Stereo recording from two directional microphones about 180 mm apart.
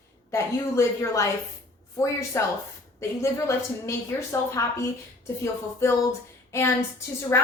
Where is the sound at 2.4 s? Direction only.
15° left (ahead or behind).